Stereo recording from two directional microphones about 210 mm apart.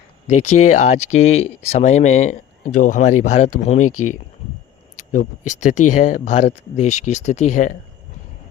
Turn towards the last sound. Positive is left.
turn(degrees=35)  # may be behind; listen again after turning